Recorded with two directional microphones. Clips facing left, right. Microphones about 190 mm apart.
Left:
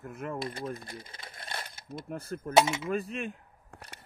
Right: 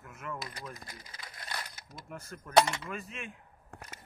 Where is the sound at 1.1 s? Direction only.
25° left (ahead or behind).